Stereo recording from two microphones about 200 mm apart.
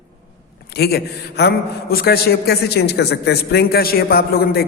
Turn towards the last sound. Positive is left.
turn(degrees=50)  # may be behind; listen again after turning